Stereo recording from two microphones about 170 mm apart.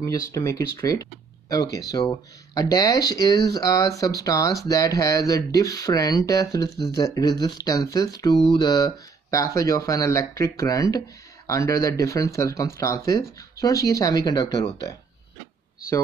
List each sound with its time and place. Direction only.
0.0 s speech: 15° left (ahead or behind)